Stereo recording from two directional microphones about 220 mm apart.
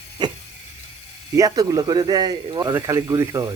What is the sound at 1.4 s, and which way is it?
Speech, 15° right (ahead or behind).